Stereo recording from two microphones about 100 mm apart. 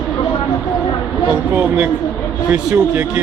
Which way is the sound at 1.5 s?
20° right (ahead or behind).